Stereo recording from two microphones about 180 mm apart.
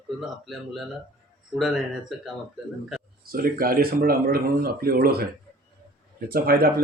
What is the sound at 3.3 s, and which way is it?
A man's voice, 55° right (ahead or behind).